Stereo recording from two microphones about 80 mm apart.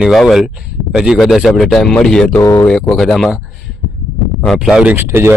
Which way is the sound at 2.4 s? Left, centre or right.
Left.